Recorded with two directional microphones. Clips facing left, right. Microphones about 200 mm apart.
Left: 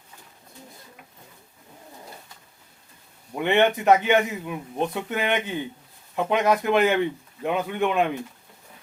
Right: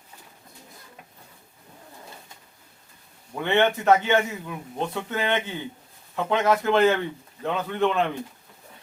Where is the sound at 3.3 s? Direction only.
15° left (ahead or behind).